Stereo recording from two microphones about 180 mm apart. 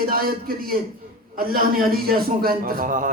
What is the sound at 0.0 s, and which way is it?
A man's voice, 55° right (ahead or behind).